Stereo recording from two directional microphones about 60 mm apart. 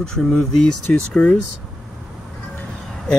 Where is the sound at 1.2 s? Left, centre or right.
Left.